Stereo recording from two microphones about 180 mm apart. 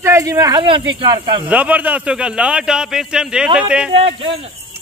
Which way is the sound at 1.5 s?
10° right (ahead or behind).